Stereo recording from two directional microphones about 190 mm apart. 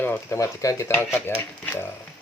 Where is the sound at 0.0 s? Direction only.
15° left (ahead or behind).